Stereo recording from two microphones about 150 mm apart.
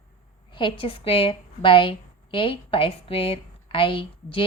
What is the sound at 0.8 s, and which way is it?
A woman's voice, 40° left (ahead or behind).